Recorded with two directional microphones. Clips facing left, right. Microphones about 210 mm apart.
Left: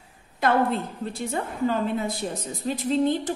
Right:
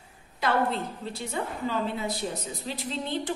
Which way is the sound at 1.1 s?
50° left (ahead or behind).